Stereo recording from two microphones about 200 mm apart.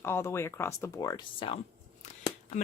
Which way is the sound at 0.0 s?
10° left (ahead or behind).